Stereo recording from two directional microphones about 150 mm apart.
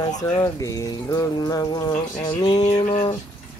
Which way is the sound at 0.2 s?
20° left (ahead or behind).